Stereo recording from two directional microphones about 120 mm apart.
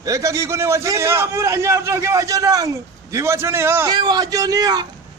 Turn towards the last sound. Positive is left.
turn(degrees=-30)  # may be behind; listen again after turning